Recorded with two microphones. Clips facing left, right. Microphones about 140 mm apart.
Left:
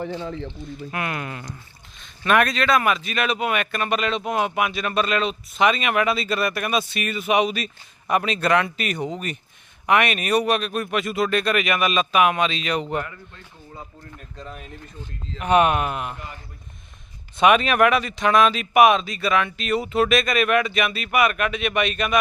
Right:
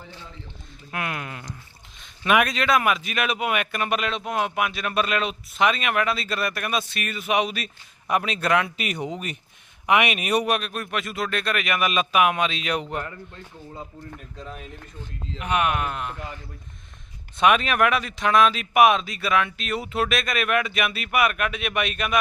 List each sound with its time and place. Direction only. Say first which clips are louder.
0.0 s speech: left 14 dB; 65° left (ahead or behind)
0.9 s a man's voice: left 1 dB; centre (ahead or behind)
14.3 s a man's voice: left 1 dB; centre (ahead or behind)
15.4 s speech: left 6 dB; 35° left (ahead or behind); by 16.1 s 10° left (ahead or behind)
17.3 s a man's voice: left 3 dB; centre (ahead or behind)